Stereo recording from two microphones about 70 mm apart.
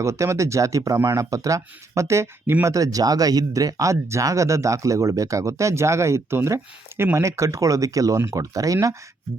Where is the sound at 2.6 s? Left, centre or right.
Right.